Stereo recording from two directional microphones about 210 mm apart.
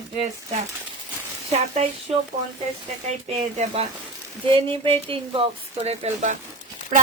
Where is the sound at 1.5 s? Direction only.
30° right (ahead or behind).